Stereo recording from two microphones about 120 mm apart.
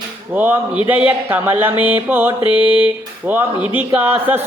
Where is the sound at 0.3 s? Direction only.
15° right (ahead or behind).